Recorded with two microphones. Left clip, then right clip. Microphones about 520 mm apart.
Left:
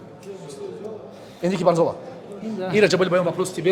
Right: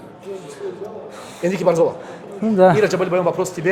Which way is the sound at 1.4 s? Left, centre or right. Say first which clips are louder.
Right 3 dB; centre.